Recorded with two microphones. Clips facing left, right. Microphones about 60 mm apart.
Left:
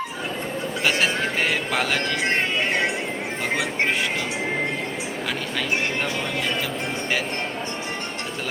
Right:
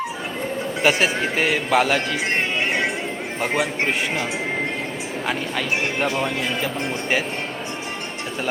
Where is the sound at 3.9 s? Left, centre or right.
Centre.